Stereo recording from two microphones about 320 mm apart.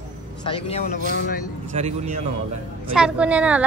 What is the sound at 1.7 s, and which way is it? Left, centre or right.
Speech, centre.